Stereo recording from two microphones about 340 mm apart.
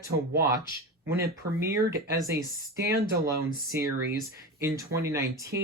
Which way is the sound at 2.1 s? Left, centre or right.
Centre.